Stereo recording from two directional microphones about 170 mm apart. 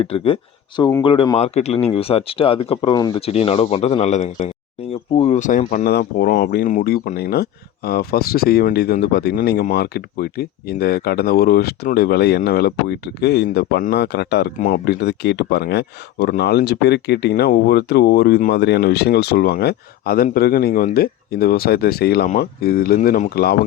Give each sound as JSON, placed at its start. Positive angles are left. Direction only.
{"t": 0.0, "sound": "speech", "side_deg": 35}
{"t": 3.2, "sound": "speech", "side_deg": 35}